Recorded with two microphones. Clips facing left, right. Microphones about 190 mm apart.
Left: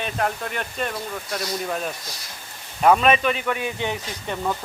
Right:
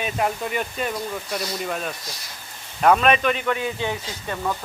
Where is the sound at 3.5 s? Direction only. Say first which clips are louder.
Right 1 dB; 20° left (ahead or behind).